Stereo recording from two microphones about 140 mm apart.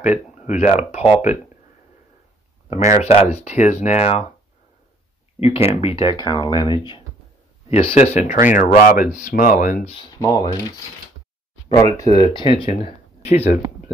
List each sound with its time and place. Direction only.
0.0 s speech: 60° left (ahead or behind)
2.9 s speech: 45° left (ahead or behind)
5.4 s speech: 45° left (ahead or behind)
6.2 s speech: 30° left (ahead or behind)
7.7 s speech: 45° left (ahead or behind); by 9.8 s 70° left (ahead or behind)
10.0 s speech: 30° left (ahead or behind)
11.8 s speech: 30° left (ahead or behind); by 13.5 s 50° left (ahead or behind)